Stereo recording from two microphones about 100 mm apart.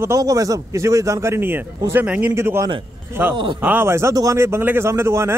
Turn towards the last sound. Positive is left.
turn(degrees=-25)  # may be behind; listen again after turning